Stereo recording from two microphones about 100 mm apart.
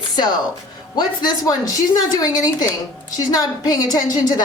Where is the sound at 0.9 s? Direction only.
40° left (ahead or behind).